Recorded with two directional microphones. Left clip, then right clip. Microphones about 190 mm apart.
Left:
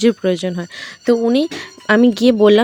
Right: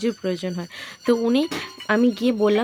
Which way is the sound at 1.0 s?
15° left (ahead or behind).